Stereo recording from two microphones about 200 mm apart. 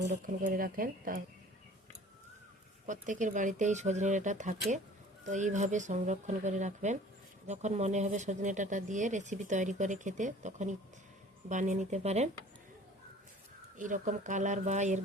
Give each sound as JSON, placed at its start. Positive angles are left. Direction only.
{"t": 0.1, "sound": "speech", "side_deg": -40}
{"t": 2.8, "sound": "speech", "side_deg": -40}
{"t": 13.7, "sound": "speech", "side_deg": -40}